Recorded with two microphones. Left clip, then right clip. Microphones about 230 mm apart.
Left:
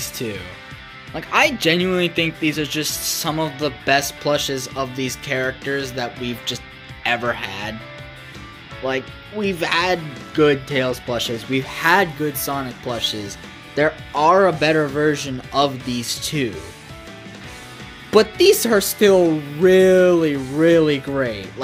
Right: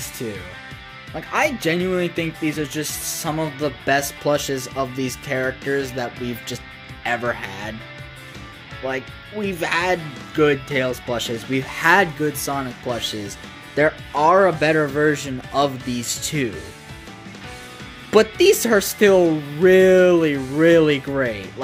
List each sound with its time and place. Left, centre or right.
0.0 s music: centre
1.1 s speech: centre
7.2 s speech: centre
8.8 s speech: centre
18.1 s speech: centre